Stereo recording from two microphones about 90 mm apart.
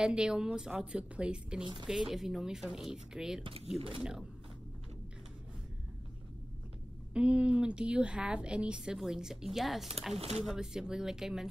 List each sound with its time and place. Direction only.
0.0 s a woman's voice: 10° right (ahead or behind)
7.2 s a woman's voice: 10° right (ahead or behind)